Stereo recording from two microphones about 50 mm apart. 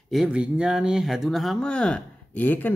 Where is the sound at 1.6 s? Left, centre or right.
Centre.